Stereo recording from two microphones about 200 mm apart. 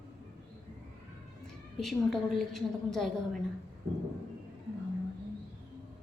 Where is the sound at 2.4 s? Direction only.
Centre (ahead or behind).